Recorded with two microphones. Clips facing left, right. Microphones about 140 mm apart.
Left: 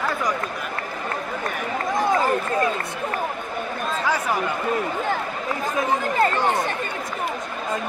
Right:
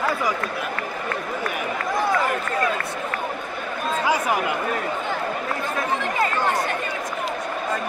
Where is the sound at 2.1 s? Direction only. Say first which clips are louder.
Left 2 dB; 25° left (ahead or behind).